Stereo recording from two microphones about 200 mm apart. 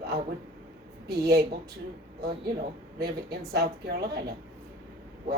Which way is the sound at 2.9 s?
50° right (ahead or behind).